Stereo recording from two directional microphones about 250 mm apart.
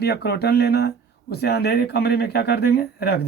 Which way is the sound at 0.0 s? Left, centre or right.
Left.